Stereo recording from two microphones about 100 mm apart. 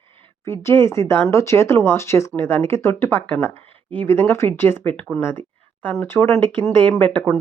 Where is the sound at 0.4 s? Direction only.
25° left (ahead or behind).